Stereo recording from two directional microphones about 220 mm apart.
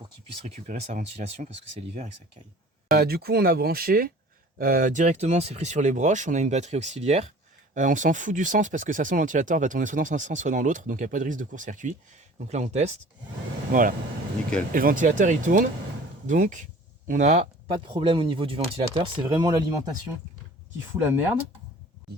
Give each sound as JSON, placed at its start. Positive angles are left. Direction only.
{"t": 0.0, "sound": "speech", "side_deg": -30}
{"t": 2.9, "sound": "speech", "side_deg": -45}